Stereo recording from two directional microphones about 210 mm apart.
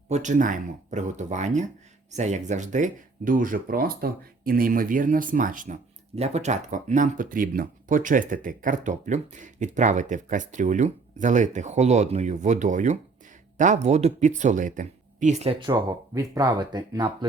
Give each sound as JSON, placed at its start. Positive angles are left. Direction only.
{"t": 0.1, "sound": "speech", "side_deg": -35}